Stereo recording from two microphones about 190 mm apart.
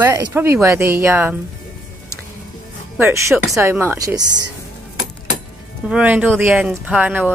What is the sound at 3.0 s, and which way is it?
Speech, 15° right (ahead or behind).